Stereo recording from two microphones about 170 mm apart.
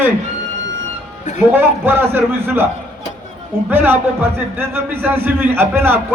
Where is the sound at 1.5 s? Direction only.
10° right (ahead or behind).